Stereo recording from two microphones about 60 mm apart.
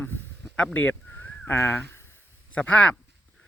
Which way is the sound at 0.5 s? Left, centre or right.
Left.